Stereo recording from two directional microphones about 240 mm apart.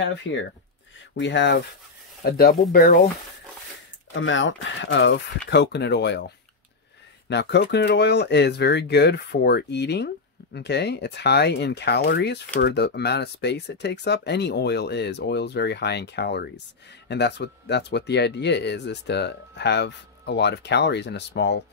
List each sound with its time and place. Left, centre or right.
0.3 s speech: left
4.1 s speech: left